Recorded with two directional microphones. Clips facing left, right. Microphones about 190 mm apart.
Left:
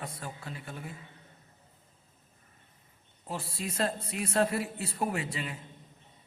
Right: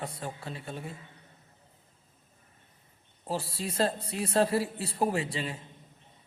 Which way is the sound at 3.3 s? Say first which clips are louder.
Right 3 dB; 35° right (ahead or behind).